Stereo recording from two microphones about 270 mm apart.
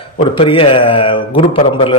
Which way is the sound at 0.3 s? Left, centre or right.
Centre.